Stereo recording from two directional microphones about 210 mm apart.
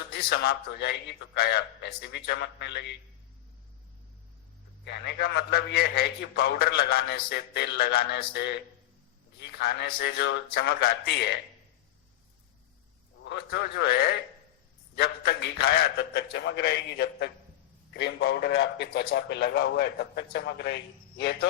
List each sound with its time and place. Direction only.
0.1 s a man's voice: 50° left (ahead or behind)
5.1 s a man's voice: 50° left (ahead or behind)
13.5 s a man's voice: 50° left (ahead or behind)